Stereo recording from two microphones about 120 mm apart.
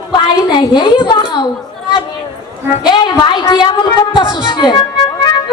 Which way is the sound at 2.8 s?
35° left (ahead or behind).